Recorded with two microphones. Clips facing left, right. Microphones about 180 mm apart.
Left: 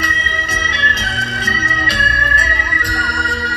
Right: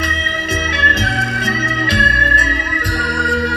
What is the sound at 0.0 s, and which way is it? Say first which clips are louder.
Music: right 2 dB; 55° right (ahead or behind).